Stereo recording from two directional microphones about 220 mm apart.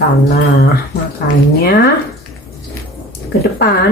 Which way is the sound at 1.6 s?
45° left (ahead or behind).